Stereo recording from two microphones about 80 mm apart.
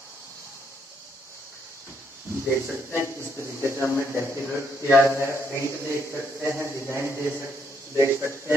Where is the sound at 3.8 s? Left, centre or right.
Left.